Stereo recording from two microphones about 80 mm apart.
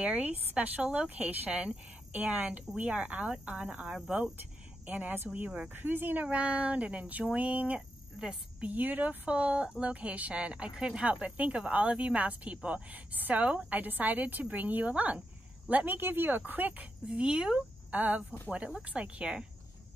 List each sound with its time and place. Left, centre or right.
0.0 s speech: centre
17.9 s speech: right